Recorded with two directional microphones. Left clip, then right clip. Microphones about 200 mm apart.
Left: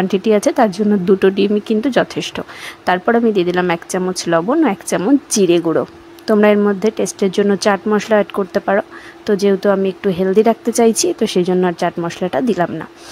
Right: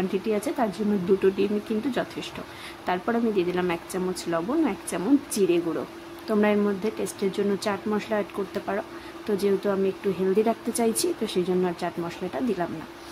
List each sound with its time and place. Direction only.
0.1 s speech: 40° left (ahead or behind)